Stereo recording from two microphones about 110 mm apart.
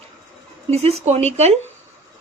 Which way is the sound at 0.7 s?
75° right (ahead or behind).